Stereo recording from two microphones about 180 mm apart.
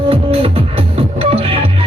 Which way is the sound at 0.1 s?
30° right (ahead or behind).